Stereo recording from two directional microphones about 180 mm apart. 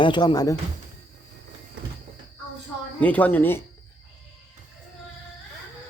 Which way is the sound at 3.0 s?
10° left (ahead or behind).